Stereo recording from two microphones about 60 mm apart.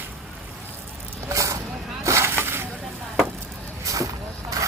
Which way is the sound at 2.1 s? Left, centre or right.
Right.